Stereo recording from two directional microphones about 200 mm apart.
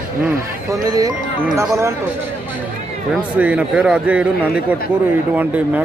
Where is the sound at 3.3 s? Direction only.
5° right (ahead or behind).